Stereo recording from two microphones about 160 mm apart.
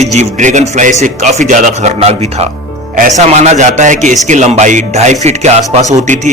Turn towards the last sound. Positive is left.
turn(degrees=-50)  # may be behind; listen again after turning